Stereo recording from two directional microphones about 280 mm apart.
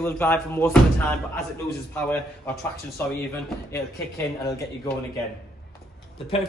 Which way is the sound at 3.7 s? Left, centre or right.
Centre.